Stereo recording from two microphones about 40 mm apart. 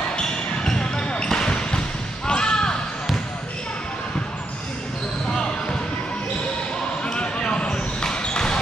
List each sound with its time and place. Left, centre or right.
0.7 s basketball bounce: left
7.1 s basketball bounce: left